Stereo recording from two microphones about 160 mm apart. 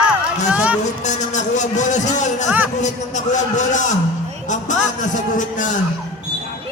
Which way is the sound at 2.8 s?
50° left (ahead or behind).